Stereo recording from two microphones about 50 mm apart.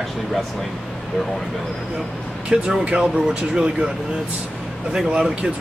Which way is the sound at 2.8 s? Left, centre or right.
Centre.